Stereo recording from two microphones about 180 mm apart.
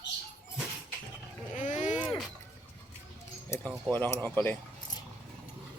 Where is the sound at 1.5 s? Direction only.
45° left (ahead or behind).